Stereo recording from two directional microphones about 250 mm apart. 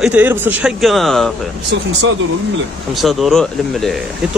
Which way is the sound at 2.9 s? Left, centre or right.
Centre.